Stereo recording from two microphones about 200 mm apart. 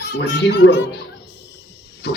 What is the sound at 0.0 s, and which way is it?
Speech, 55° left (ahead or behind).